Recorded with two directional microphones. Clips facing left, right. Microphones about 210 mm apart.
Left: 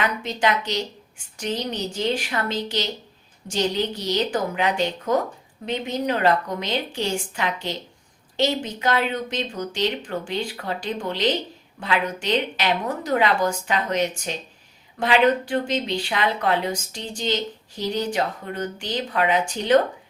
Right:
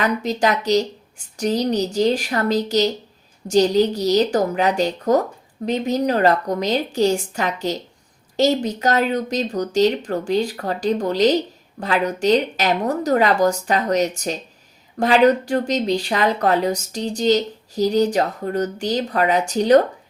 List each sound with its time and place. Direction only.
0.0 s speech: 40° right (ahead or behind)